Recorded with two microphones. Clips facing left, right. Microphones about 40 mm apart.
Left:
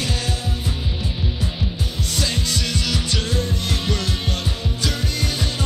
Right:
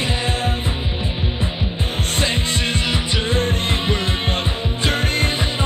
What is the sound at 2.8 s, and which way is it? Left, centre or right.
Music, right.